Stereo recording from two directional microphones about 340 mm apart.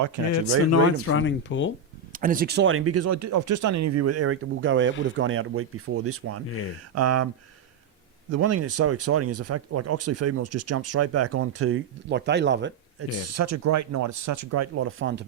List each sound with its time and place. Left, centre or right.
0.4 s speech: left
2.1 s speech: right
8.3 s speech: right